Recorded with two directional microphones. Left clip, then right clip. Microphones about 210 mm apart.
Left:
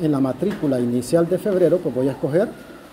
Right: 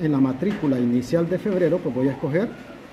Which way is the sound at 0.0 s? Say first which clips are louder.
Left 2 dB; 5° left (ahead or behind).